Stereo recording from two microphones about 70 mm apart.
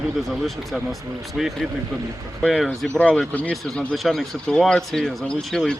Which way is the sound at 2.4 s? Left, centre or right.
Centre.